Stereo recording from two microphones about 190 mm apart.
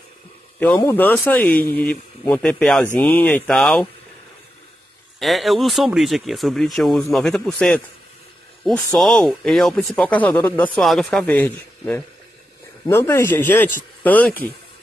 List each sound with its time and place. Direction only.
0.6 s a man's voice: 10° left (ahead or behind)
5.2 s a man's voice: centre (ahead or behind)